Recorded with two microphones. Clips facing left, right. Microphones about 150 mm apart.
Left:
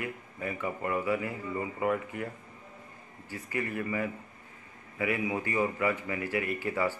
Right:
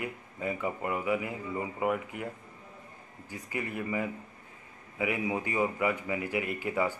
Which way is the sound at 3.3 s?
15° right (ahead or behind).